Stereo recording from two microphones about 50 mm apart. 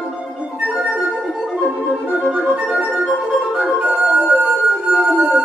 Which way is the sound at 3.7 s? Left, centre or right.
Right.